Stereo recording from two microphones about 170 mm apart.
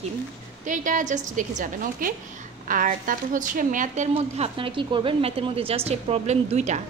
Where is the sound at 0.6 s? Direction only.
50° right (ahead or behind).